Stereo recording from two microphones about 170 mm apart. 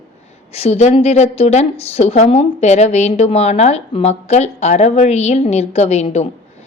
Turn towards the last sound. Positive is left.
turn(degrees=40)  # may be behind; listen again after turning